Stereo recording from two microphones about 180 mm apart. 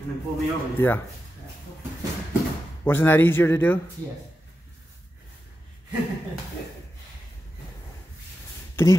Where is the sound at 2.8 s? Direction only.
10° left (ahead or behind).